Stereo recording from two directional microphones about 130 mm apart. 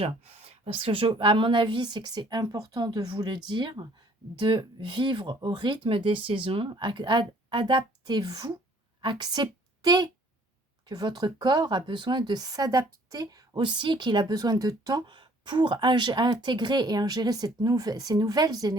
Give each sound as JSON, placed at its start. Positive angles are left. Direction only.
{"t": 0.0, "sound": "a woman's voice", "side_deg": -60}